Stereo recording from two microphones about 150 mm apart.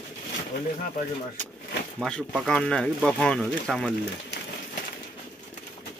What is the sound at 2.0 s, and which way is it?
Speech, 5° left (ahead or behind).